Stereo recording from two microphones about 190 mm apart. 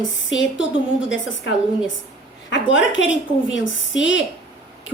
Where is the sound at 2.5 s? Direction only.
80° left.